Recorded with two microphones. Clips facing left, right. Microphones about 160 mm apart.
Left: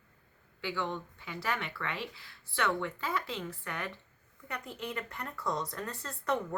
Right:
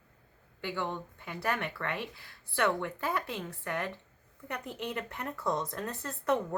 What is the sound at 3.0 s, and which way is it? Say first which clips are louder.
Speech: right 2 dB; 55° right (ahead or behind).